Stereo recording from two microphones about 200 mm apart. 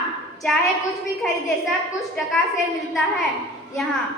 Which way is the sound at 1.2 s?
5° left (ahead or behind).